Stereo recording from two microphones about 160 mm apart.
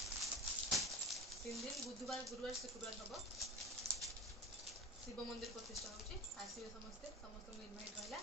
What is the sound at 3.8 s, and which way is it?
Bird, 40° right (ahead or behind).